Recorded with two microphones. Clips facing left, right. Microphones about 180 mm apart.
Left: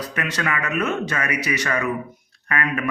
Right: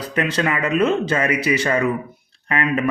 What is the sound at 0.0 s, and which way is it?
Speech, 30° right (ahead or behind).